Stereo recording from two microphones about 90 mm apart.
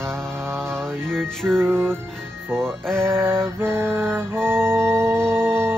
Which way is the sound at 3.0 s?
25° right (ahead or behind).